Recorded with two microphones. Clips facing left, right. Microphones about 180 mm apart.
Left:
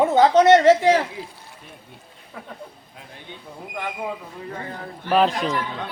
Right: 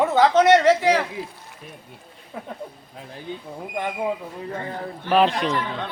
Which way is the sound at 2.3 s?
25° right (ahead or behind).